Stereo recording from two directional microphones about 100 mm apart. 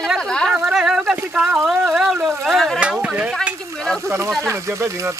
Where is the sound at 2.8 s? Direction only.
10° right (ahead or behind).